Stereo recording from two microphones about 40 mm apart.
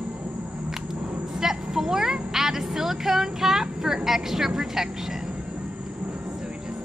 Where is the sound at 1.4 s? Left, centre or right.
Centre.